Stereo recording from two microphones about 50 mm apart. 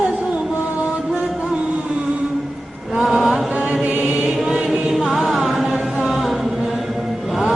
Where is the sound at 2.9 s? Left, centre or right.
Centre.